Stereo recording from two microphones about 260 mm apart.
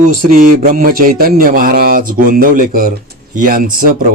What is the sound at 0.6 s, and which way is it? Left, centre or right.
Speech, right.